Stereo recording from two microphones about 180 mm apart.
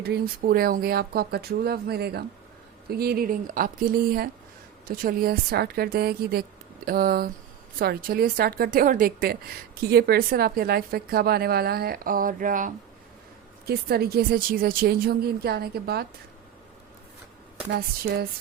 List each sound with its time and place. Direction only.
0.0 s a woman's voice: 60° right (ahead or behind)
13.7 s a woman's voice: 60° right (ahead or behind)
17.7 s a woman's voice: 65° right (ahead or behind)